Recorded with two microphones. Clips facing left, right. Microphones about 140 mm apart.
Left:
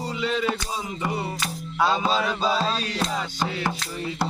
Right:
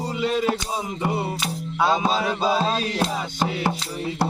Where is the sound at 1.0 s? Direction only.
25° right (ahead or behind).